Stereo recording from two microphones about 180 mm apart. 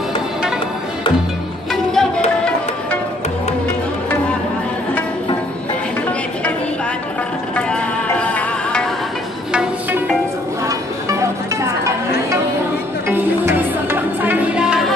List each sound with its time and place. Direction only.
1.7 s music: 5° left (ahead or behind)
7.5 s music: 5° left (ahead or behind)
10.7 s music: 15° right (ahead or behind)
13.1 s music: 10° right (ahead or behind)